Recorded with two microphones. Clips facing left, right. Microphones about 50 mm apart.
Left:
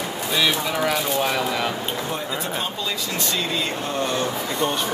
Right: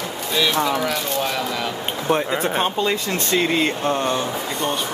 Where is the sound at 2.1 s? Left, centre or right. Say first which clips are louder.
Right 7 dB; right.